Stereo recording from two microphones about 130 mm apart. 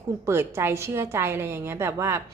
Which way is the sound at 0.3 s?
20° right (ahead or behind).